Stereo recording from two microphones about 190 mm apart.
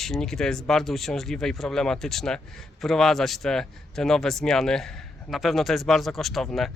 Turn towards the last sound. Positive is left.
turn(degrees=0)  # may be behind; listen again after turning